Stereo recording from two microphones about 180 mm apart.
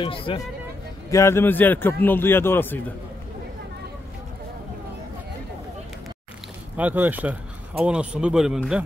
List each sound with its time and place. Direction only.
0.0 s speech: 30° left (ahead or behind)
1.1 s a man's voice: 15° left (ahead or behind)
6.8 s speech: 10° right (ahead or behind)